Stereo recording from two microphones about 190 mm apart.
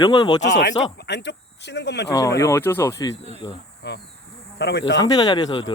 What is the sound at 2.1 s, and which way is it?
Speech, 15° left (ahead or behind).